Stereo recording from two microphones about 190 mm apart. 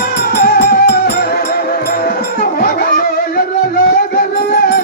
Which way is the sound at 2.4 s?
50° left (ahead or behind).